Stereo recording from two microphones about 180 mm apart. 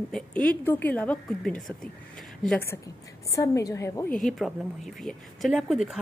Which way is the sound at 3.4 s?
15° left (ahead or behind).